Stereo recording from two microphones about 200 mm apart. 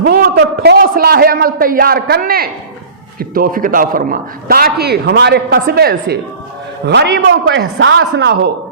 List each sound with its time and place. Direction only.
0.0 s a man's voice: 50° right (ahead or behind)